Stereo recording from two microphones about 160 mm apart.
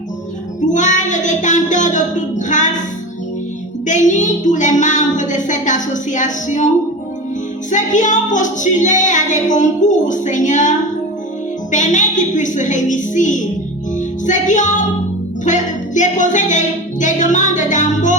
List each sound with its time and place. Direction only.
0.7 s child singing: 50° left (ahead or behind)
3.8 s music: 50° left (ahead or behind)
7.7 s music: 50° left (ahead or behind)